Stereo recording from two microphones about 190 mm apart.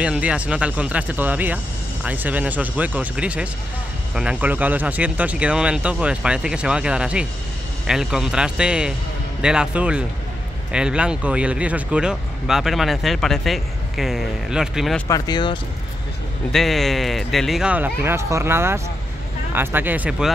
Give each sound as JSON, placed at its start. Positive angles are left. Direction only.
{"t": 0.0, "sound": "speech", "side_deg": -5}
{"t": 15.0, "sound": "speech", "side_deg": 20}
{"t": 16.5, "sound": "speech", "side_deg": 0}